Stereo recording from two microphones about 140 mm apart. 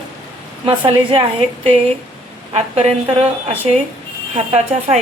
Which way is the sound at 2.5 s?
50° right (ahead or behind).